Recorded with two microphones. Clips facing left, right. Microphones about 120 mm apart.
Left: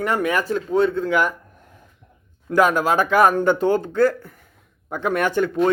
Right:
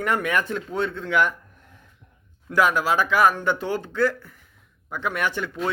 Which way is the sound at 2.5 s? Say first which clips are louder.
Left 4 dB; 40° left (ahead or behind).